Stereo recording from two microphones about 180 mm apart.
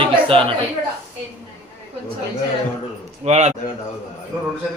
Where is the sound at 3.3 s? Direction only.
40° right (ahead or behind).